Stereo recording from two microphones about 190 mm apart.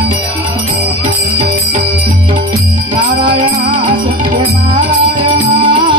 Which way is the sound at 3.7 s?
45° right (ahead or behind).